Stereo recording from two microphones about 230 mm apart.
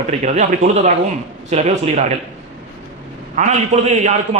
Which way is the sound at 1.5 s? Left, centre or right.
Right.